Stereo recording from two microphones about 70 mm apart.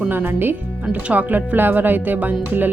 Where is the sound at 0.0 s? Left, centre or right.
Right.